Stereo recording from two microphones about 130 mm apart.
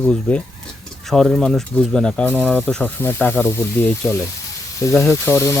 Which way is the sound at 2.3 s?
10° right (ahead or behind).